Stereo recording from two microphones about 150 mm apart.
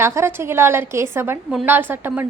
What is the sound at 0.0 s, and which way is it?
A woman's voice, 15° right (ahead or behind).